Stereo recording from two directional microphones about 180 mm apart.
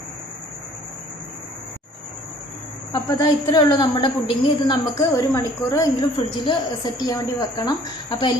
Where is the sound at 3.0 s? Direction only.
20° left (ahead or behind).